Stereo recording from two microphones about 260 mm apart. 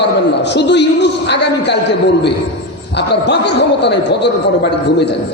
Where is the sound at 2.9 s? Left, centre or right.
Left.